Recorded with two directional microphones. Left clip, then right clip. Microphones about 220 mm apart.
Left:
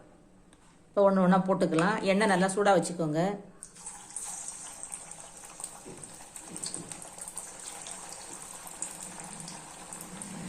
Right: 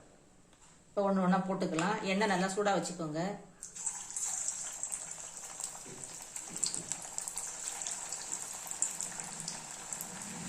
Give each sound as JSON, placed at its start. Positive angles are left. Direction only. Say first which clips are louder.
{"t": 0.9, "sound": "speech", "louder": "left 7 dB", "side_deg": 30}